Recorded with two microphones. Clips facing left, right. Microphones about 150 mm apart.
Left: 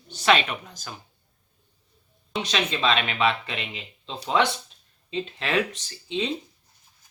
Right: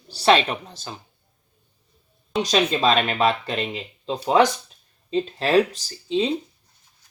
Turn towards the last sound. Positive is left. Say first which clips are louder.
# right 6 dB
turn(degrees=-35)  # may be behind; listen again after turning